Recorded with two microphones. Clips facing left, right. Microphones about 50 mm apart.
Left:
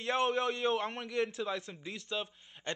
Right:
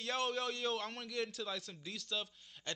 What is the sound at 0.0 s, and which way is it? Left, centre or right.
A man's voice, centre.